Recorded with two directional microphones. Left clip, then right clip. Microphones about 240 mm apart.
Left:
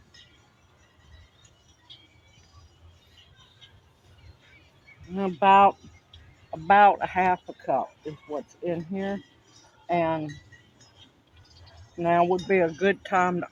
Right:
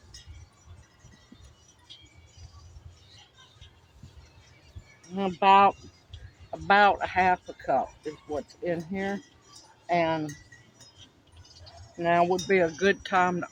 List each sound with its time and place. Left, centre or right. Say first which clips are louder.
1.9 s music: even; right
5.1 s speech: left 1 dB; left
11.9 s speech: left 1 dB; left